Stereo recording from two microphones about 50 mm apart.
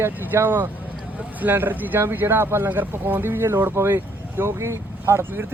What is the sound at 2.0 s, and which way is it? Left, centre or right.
Speech, right.